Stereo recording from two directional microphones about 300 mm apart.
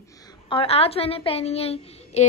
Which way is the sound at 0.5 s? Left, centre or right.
Centre.